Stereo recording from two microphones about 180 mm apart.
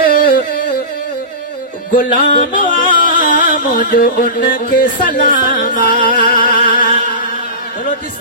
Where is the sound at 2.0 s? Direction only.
55° left (ahead or behind).